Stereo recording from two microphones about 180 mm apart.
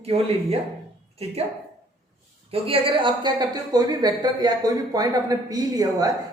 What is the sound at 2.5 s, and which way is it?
A woman's voice, 30° right (ahead or behind).